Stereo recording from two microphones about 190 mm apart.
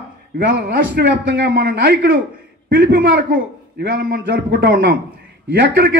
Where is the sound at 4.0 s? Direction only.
70° right (ahead or behind).